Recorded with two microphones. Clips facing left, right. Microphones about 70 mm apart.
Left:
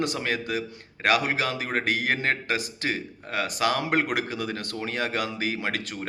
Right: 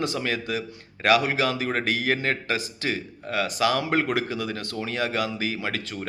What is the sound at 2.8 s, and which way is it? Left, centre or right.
A man's voice, left.